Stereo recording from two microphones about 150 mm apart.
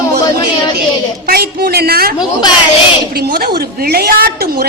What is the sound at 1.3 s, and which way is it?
Speech, 90° right.